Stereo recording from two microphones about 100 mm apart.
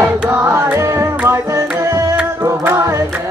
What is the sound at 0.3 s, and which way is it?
Music, 25° right (ahead or behind).